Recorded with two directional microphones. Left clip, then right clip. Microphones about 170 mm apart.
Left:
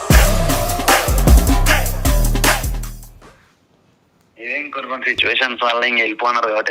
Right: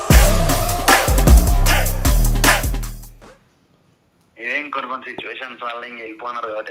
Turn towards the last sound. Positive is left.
turn(degrees=40)  # may be behind; listen again after turning